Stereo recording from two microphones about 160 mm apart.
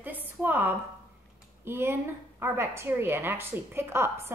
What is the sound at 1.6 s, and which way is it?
A woman's voice, 15° right (ahead or behind).